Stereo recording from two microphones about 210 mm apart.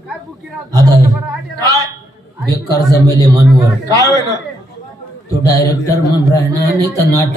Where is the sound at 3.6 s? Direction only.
15° right (ahead or behind).